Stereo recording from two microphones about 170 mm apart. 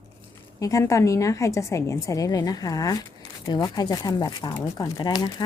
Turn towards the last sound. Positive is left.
turn(degrees=25)  # may be behind; listen again after turning